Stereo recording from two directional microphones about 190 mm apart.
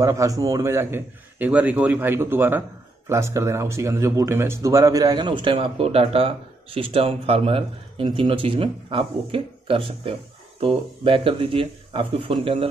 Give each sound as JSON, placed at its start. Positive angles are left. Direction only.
{"t": 0.0, "sound": "a man's voice", "side_deg": -15}